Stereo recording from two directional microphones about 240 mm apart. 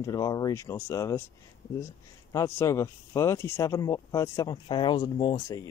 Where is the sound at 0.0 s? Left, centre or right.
Centre.